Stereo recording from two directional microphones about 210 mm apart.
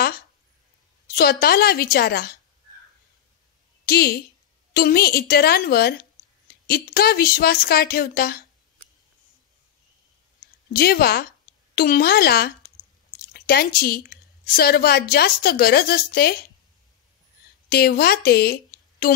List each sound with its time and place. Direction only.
1.0 s a woman's voice: 45° left (ahead or behind)
3.8 s a woman's voice: 50° left (ahead or behind)
10.8 s a woman's voice: 50° left (ahead or behind)
17.6 s a woman's voice: 45° left (ahead or behind)